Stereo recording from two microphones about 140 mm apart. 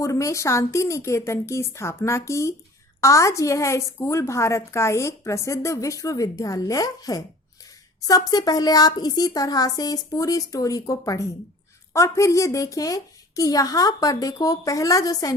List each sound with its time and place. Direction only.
0.0 s a woman's voice: 20° left (ahead or behind)